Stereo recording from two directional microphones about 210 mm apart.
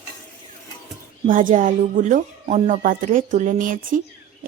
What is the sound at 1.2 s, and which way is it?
Speech, 40° right (ahead or behind).